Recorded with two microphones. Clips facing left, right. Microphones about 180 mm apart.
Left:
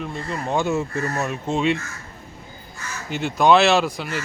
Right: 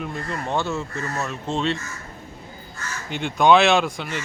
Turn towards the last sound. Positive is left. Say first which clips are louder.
# left 1 dB
turn(degrees=0)  # may be behind; listen again after turning